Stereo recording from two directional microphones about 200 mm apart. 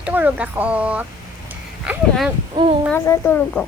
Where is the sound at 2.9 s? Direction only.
10° left (ahead or behind).